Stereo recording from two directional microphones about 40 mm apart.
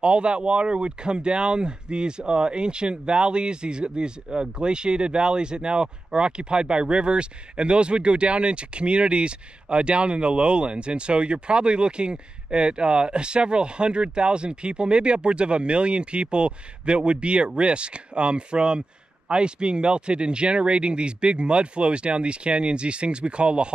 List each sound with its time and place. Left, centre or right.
0.0 s speech: right